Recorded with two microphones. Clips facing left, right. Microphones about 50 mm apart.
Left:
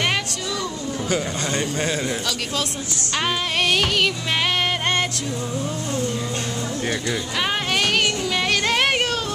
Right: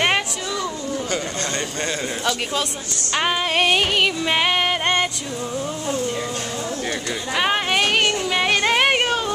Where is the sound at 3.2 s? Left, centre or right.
Centre.